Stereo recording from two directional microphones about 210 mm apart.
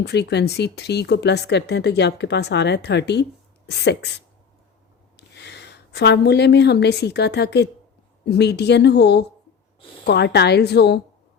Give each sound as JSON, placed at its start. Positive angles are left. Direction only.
{"t": 0.0, "sound": "speech", "side_deg": 55}
{"t": 5.1, "sound": "speech", "side_deg": 55}